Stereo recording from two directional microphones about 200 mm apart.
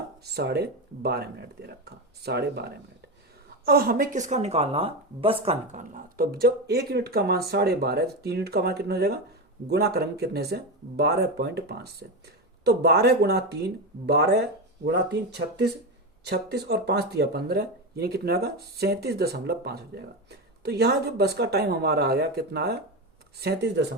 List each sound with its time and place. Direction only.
0.3 s speech: 55° right (ahead or behind); by 5.8 s 30° right (ahead or behind)
5.9 s speech: 45° right (ahead or behind)